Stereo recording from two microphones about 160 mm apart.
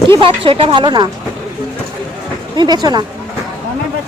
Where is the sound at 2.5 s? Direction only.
25° right (ahead or behind).